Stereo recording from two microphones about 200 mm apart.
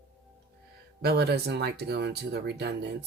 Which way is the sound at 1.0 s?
55° right (ahead or behind).